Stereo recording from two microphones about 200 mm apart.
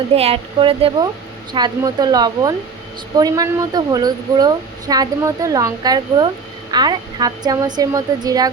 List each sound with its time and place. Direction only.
0.2 s speech: 30° right (ahead or behind)